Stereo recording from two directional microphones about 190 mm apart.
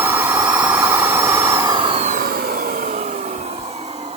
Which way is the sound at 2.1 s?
50° right (ahead or behind).